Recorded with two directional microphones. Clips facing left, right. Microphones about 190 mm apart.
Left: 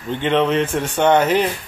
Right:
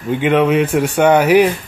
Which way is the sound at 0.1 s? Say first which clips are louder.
Right 4 dB; 10° right (ahead or behind).